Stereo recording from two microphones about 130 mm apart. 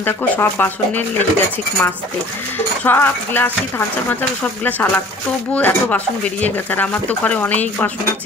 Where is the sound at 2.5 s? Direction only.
15° left (ahead or behind).